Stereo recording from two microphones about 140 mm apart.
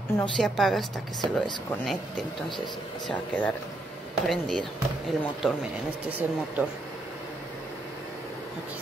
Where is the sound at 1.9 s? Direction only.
Centre (ahead or behind).